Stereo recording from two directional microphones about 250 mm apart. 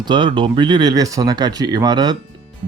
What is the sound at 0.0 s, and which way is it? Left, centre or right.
Speech, centre.